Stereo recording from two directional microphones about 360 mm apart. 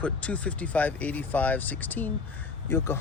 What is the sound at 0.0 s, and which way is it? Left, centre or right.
Speech, centre.